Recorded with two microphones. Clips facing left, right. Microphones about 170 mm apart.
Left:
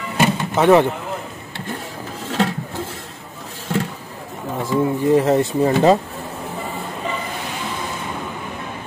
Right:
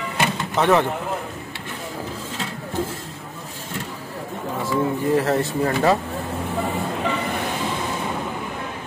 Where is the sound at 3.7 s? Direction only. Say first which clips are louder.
Left 10 dB; 75° left (ahead or behind).